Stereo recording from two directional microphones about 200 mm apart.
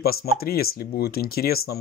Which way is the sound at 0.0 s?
50° left (ahead or behind).